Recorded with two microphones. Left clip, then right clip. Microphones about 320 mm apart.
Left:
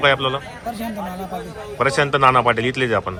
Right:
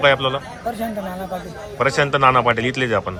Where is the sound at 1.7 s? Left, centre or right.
Centre.